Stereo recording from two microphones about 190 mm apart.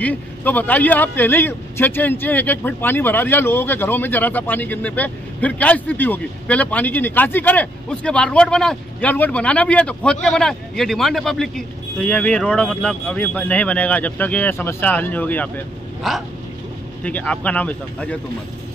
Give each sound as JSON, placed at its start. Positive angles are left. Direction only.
{"t": 0.0, "sound": "speech", "side_deg": 10}